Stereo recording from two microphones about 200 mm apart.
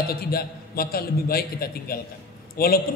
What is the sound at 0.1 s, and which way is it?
A man's voice, 50° left (ahead or behind).